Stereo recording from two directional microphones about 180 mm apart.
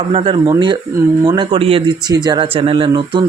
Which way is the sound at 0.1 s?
30° right (ahead or behind).